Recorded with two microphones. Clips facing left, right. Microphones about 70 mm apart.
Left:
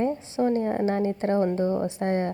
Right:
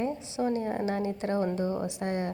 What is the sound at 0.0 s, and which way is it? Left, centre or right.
A woman's voice, left.